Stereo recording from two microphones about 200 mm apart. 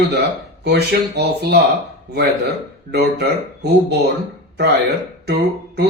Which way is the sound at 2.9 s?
55° right (ahead or behind).